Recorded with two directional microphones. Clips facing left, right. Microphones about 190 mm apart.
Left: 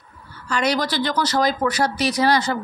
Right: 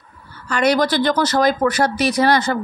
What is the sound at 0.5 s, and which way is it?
Speech, 55° right (ahead or behind).